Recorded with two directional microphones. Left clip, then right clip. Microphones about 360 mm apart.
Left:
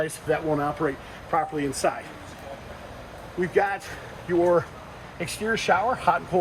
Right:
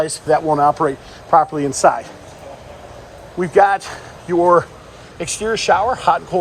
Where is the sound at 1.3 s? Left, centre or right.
Right.